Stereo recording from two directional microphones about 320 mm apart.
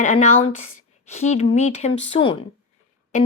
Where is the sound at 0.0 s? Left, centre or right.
Left.